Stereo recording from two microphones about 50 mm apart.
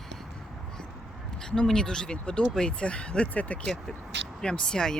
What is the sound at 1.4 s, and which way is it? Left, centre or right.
Speech, centre.